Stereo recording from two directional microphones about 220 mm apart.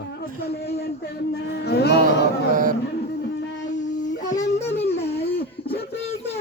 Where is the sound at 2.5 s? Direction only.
40° right (ahead or behind).